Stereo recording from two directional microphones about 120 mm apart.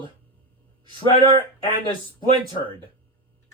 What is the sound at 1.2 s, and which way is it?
Speech, 45° right (ahead or behind).